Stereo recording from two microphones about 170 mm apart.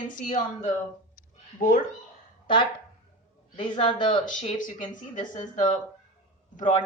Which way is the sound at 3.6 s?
35° left (ahead or behind).